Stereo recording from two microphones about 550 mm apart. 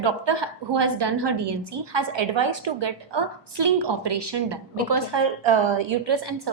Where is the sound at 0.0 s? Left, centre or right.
Right.